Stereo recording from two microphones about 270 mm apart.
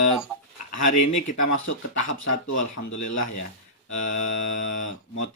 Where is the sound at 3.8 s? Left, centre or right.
Left.